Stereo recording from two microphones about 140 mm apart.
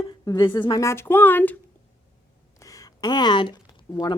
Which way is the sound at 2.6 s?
25° left (ahead or behind).